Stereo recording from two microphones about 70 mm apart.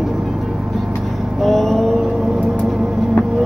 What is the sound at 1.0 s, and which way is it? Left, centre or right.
Vehicle, centre.